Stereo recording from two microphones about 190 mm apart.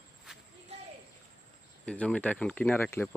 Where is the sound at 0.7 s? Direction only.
35° right (ahead or behind).